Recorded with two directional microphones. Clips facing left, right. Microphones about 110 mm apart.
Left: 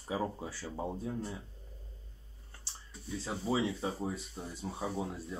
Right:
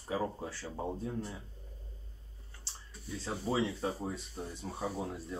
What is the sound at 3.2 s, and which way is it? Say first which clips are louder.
Speech: even; 10° left (ahead or behind).